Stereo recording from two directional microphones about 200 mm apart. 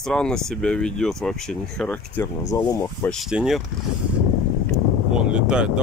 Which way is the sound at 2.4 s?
15° left (ahead or behind).